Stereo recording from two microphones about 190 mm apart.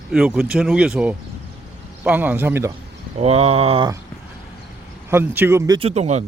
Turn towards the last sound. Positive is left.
turn(degrees=-35)  # may be behind; listen again after turning